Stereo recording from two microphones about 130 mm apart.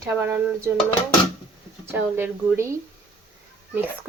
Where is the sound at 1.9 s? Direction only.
15° right (ahead or behind).